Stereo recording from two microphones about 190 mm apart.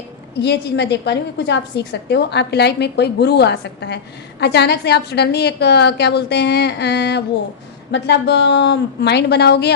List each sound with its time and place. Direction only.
0.3 s a woman's voice: 65° left (ahead or behind)